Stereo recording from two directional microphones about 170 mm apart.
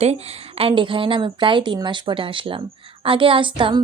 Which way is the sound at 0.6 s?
30° right (ahead or behind).